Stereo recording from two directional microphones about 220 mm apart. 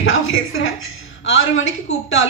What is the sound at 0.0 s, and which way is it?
A woman's voice, 65° left (ahead or behind).